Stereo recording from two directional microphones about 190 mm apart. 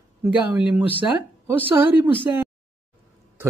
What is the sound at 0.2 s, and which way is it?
Speech, 5° right (ahead or behind).